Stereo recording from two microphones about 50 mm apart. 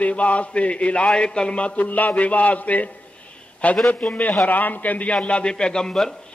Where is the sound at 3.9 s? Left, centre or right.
Left; by 6.1 s centre.